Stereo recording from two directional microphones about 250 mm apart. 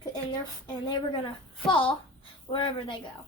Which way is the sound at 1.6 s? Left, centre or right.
Left.